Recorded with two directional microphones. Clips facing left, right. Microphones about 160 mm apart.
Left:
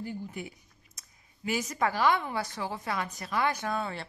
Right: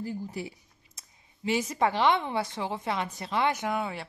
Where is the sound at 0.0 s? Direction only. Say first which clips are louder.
Right 3 dB; 35° right (ahead or behind).